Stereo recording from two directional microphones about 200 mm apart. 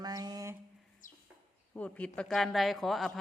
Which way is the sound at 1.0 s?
40° left (ahead or behind).